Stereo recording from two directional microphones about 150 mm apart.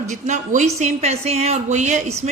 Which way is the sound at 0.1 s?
55° right (ahead or behind).